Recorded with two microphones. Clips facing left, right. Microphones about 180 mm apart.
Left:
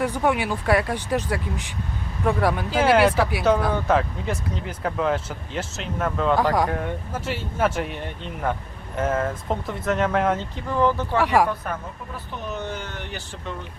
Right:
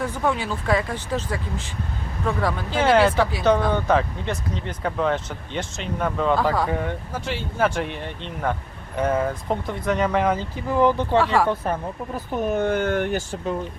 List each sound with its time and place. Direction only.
0.0 s speech: 15° left (ahead or behind)
10.8 s speech: 15° right (ahead or behind)
11.2 s speech: 15° left (ahead or behind)
11.4 s speech: 30° right (ahead or behind)
12.1 s speech: 45° right (ahead or behind)